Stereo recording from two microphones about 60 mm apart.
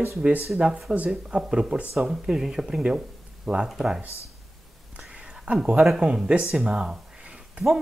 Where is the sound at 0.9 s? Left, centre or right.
Right.